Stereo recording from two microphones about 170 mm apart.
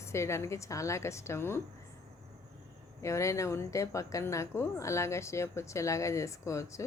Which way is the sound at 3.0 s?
15° left (ahead or behind).